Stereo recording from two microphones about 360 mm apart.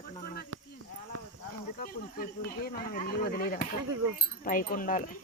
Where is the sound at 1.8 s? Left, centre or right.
Left.